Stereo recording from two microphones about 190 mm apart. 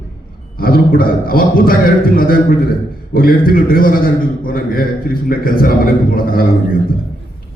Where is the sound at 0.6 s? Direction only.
50° left (ahead or behind).